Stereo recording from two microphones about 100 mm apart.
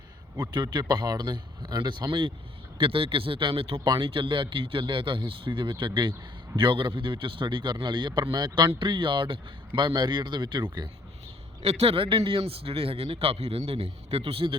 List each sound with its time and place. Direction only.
0.3 s speech: 45° right (ahead or behind)
11.6 s a man's voice: 85° right; by 14.5 s 70° right (ahead or behind)